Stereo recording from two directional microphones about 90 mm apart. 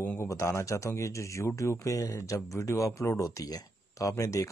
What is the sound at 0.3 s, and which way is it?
Speech, 30° left (ahead or behind).